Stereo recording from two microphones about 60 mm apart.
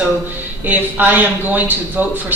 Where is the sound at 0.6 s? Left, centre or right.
Right.